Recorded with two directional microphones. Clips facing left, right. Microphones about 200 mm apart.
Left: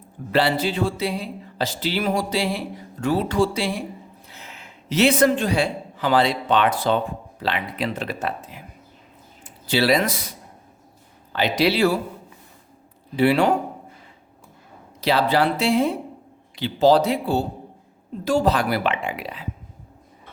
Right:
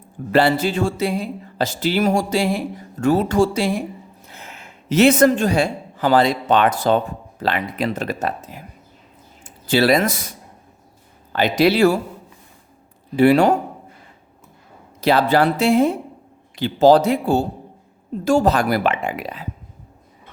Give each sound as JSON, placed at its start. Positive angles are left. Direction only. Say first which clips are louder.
{"t": 0.3, "sound": "a man's voice", "louder": "right 4 dB", "side_deg": -50}
{"t": 13.1, "sound": "speech", "louder": "right 4 dB", "side_deg": -45}
{"t": 15.0, "sound": "speech", "louder": "right 4 dB", "side_deg": -50}